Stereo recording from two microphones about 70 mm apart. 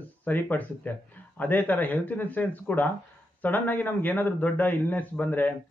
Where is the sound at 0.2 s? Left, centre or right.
Left.